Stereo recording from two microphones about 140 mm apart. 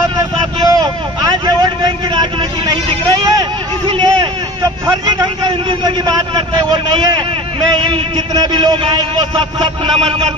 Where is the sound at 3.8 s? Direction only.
35° right (ahead or behind).